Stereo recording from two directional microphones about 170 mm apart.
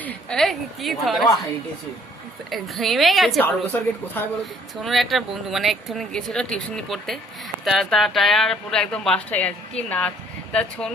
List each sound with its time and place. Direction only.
0.0 s speech: 5° left (ahead or behind)
2.5 s speech: centre (ahead or behind)
3.7 s speech: 10° left (ahead or behind)
4.8 s speech: centre (ahead or behind)